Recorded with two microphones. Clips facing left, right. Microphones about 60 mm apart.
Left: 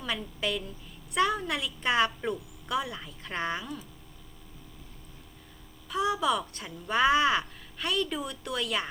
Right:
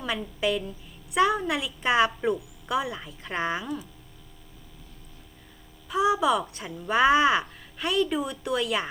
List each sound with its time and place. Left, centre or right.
0.0 s a woman's voice: centre
5.9 s speech: centre